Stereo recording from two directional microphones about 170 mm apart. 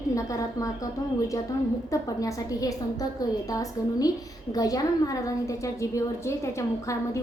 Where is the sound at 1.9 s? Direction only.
20° left (ahead or behind).